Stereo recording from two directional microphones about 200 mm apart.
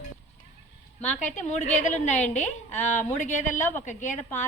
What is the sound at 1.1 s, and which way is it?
A woman's voice, 35° left (ahead or behind).